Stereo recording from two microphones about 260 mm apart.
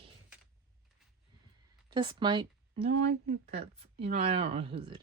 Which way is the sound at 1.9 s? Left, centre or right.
Centre.